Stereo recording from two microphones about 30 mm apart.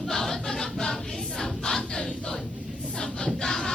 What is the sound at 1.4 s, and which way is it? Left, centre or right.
Choir, centre.